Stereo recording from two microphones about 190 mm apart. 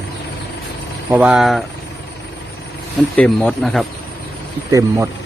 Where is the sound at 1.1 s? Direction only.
5° right (ahead or behind).